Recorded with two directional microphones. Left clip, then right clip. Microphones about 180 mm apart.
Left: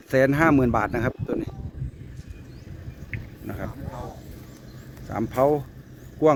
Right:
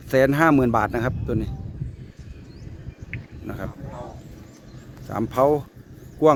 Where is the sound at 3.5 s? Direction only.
15° right (ahead or behind).